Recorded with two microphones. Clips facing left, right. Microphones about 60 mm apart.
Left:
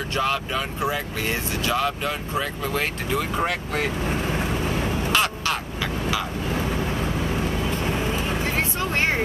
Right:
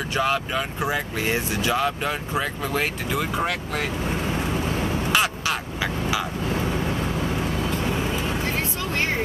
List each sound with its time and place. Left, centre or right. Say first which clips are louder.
0.1 s speech: right 1 dB; centre
5.1 s crow: even; centre